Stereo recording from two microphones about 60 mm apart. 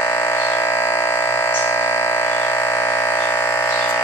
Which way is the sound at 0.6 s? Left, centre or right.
Left.